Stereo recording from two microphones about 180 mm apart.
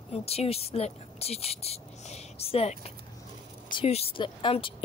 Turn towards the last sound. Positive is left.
turn(degrees=30)  # may be behind; listen again after turning